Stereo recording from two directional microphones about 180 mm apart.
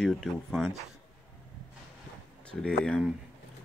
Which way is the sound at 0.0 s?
Centre (ahead or behind).